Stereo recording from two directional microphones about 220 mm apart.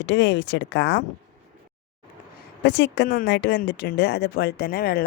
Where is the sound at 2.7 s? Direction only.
50° left (ahead or behind).